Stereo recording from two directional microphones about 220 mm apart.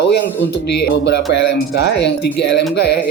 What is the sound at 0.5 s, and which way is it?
Speech, 50° left (ahead or behind).